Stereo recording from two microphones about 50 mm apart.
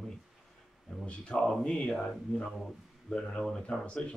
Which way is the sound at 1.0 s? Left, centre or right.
Left.